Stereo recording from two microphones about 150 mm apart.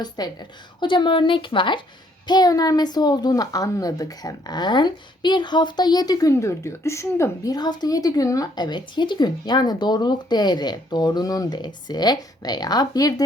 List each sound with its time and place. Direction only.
0.0 s a woman's voice: 30° left (ahead or behind)